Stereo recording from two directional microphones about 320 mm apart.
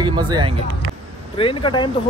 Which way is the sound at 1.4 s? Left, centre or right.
Centre.